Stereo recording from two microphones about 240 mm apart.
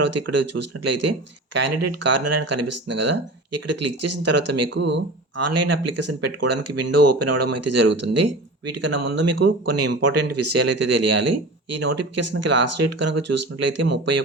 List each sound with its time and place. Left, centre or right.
0.0 s speech: right
4.7 s speech: right
5.4 s speech: right